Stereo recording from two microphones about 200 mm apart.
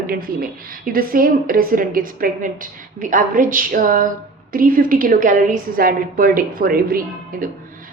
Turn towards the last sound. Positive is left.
turn(degrees=-45)  # may be behind; listen again after turning